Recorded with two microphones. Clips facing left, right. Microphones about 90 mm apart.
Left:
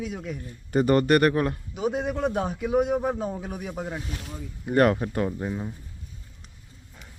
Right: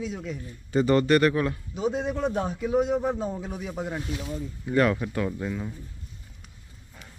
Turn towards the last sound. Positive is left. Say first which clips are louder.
# left 1 dB
turn(degrees=20)  # may be behind; listen again after turning